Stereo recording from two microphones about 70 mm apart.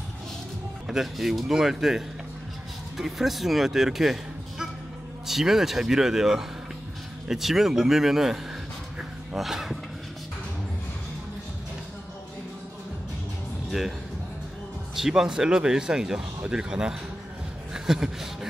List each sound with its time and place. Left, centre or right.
0.8 s speech: centre
13.7 s speech: centre
15.0 s speech: centre